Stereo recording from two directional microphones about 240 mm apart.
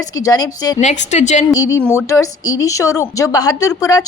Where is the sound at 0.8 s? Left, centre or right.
Left.